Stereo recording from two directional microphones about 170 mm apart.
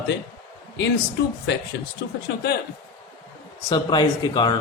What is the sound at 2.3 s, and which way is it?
Speech, 90° left.